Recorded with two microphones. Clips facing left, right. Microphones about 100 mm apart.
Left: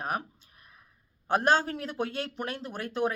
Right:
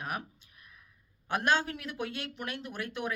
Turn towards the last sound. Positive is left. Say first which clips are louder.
# left 6 dB
turn(degrees=35)  # may be behind; listen again after turning